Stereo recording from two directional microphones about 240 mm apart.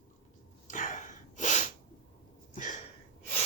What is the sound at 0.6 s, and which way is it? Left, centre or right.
Sneeze, left.